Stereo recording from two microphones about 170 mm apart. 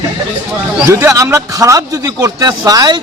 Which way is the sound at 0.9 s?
15° right (ahead or behind).